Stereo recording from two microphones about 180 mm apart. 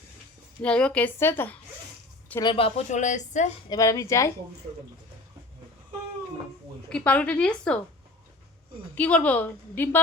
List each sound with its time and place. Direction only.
0.6 s a woman's voice: 5° left (ahead or behind)
2.4 s speech: 30° left (ahead or behind)
3.7 s a woman's voice: 20° left (ahead or behind)
6.9 s a woman's voice: 5° left (ahead or behind)
9.0 s a woman's voice: 5° left (ahead or behind)